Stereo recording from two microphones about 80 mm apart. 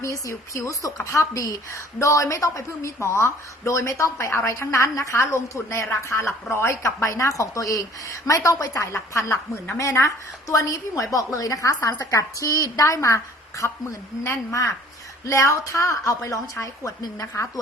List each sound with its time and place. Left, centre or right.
0.3 s a woman's voice: left